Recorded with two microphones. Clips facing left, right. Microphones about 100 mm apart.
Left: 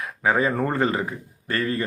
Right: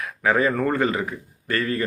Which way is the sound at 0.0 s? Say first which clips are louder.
Right 1 dB; 20° left (ahead or behind).